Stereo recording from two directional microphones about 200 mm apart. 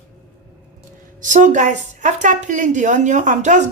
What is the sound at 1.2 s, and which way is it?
A woman's voice, 40° right (ahead or behind).